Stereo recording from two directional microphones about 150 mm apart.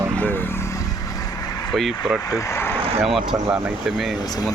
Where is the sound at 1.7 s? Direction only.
Centre (ahead or behind).